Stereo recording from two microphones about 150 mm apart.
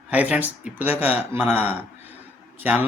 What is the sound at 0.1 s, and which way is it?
Speech, 10° right (ahead or behind).